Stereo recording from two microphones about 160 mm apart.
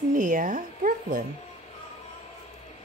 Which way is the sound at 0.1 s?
55° right (ahead or behind).